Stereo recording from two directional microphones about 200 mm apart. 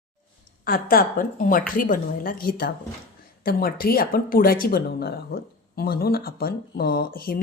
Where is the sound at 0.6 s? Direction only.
45° left (ahead or behind).